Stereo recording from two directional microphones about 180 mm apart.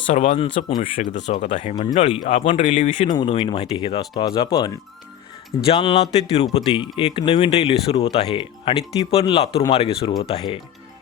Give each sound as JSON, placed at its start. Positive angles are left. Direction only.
{"t": 0.1, "sound": "speech", "side_deg": 35}
{"t": 1.1, "sound": "speech", "side_deg": 40}
{"t": 3.1, "sound": "speech", "side_deg": 25}